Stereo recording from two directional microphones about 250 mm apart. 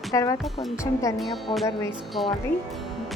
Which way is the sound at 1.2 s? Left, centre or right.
Centre.